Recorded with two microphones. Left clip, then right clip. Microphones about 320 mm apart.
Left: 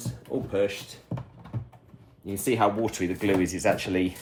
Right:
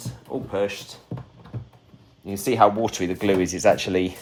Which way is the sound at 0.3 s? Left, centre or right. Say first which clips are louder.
Right 1 dB; centre.